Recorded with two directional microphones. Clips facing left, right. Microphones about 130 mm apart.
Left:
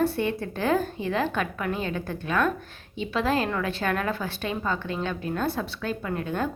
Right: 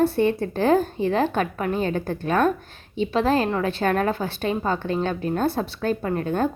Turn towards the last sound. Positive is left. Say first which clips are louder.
# right 5 dB
turn(degrees=-35)  # may be behind; listen again after turning